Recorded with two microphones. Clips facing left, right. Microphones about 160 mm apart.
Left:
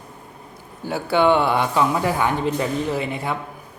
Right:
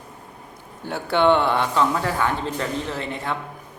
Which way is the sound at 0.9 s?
5° left (ahead or behind).